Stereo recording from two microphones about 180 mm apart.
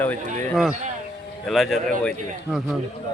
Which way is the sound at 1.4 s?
Centre (ahead or behind).